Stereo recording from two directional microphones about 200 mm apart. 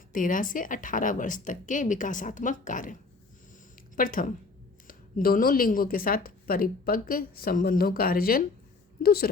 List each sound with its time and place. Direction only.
0.1 s a woman's voice: 40° left (ahead or behind)